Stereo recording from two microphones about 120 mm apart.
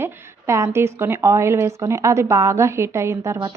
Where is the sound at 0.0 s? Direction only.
25° right (ahead or behind).